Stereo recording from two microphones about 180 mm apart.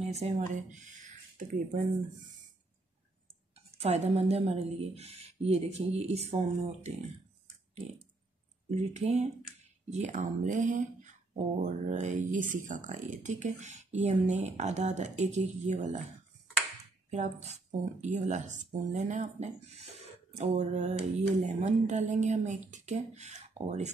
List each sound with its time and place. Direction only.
0.0 s speech: 40° right (ahead or behind)
3.5 s speech: 35° right (ahead or behind)
8.6 s speech: 40° right (ahead or behind)
17.1 s speech: 40° right (ahead or behind)